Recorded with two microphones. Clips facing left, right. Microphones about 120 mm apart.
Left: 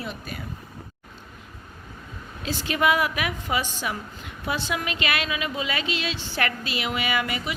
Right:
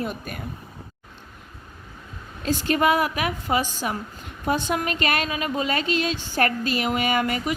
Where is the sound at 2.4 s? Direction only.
45° right (ahead or behind).